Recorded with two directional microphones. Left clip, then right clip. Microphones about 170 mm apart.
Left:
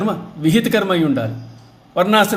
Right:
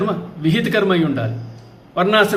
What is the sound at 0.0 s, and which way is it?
A man's voice, 55° left (ahead or behind).